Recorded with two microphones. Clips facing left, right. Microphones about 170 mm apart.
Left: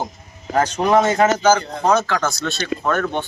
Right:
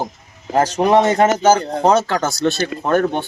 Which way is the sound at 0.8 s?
30° right (ahead or behind).